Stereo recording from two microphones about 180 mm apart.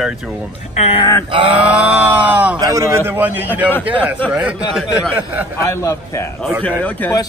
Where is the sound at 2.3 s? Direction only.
10° right (ahead or behind).